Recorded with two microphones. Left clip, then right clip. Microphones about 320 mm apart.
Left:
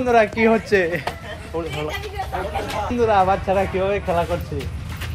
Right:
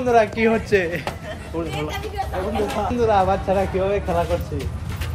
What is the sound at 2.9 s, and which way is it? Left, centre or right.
Speech, left.